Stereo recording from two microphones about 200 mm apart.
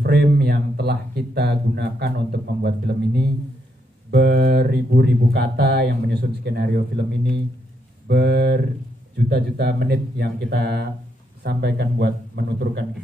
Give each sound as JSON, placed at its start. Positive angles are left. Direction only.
{"t": 0.0, "sound": "speech", "side_deg": -55}